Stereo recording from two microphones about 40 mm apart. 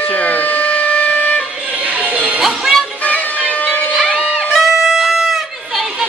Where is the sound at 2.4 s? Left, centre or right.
Centre.